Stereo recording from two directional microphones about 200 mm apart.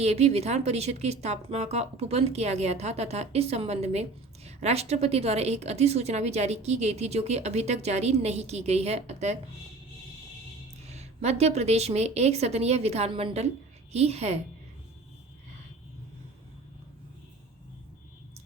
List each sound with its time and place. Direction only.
0.0 s speech: 30° right (ahead or behind)
10.8 s speech: 35° right (ahead or behind)